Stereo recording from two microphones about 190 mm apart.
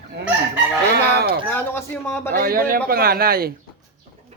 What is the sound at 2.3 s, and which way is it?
Speech, 50° right (ahead or behind).